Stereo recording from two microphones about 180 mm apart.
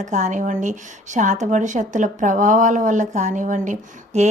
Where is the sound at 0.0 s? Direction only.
40° right (ahead or behind).